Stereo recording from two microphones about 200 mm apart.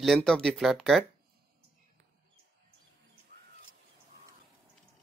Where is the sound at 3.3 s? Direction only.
50° right (ahead or behind).